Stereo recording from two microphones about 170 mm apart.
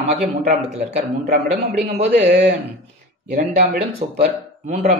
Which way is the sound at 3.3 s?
40° right (ahead or behind).